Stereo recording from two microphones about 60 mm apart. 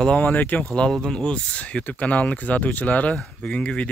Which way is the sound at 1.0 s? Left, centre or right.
Centre.